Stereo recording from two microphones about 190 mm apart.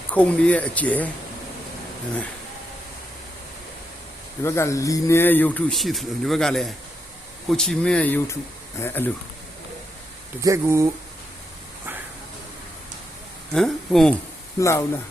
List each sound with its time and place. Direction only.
0.1 s speech: 5° left (ahead or behind)
4.4 s speech: 15° left (ahead or behind)
10.4 s speech: 15° right (ahead or behind)
13.5 s speech: 5° left (ahead or behind)
14.6 s speech: 15° left (ahead or behind)